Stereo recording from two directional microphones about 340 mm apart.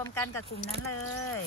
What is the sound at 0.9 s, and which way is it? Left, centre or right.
Speech, left.